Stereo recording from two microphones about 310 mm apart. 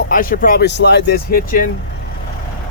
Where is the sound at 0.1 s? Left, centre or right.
Left.